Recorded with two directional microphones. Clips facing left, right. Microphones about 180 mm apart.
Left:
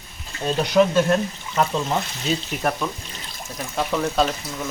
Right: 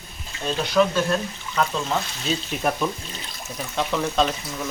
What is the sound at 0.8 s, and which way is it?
Speech, 20° left (ahead or behind).